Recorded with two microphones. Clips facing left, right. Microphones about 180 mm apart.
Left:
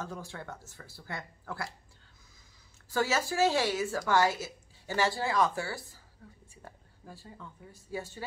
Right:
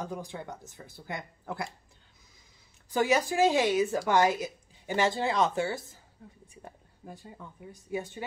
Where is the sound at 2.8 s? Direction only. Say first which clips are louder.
Right 4 dB; 15° right (ahead or behind).